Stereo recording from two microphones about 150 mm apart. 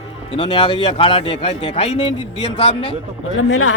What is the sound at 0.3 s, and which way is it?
Speech, 35° left (ahead or behind).